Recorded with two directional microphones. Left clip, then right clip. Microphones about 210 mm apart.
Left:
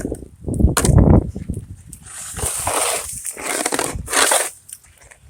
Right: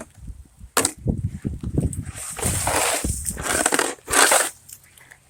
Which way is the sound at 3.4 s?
10° left (ahead or behind).